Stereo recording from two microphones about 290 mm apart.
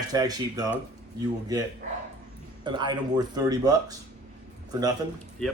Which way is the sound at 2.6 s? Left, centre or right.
Centre.